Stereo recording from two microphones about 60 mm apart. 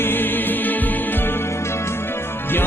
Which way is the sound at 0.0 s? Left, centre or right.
Left.